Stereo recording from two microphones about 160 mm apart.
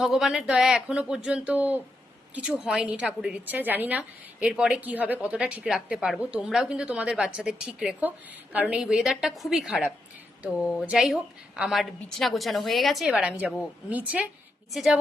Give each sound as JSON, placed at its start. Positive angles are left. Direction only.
{"t": 0.0, "sound": "a woman's voice", "side_deg": 0}